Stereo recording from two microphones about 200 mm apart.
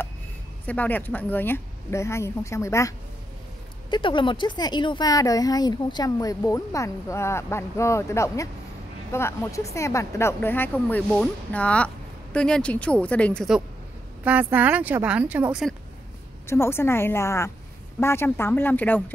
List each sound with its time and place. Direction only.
0.7 s speech: 10° left (ahead or behind)
3.9 s speech: 25° left (ahead or behind); by 15.7 s 5° right (ahead or behind)
16.4 s speech: 10° left (ahead or behind)